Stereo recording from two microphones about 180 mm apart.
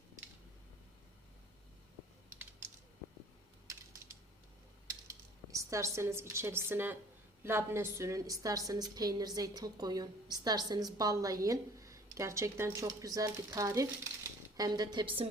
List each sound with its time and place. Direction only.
5.0 s a woman's voice: 15° right (ahead or behind)